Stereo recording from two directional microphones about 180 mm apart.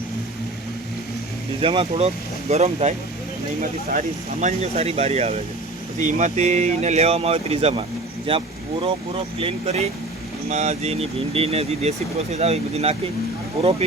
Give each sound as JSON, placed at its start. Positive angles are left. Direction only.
{"t": 1.6, "sound": "speech", "side_deg": -35}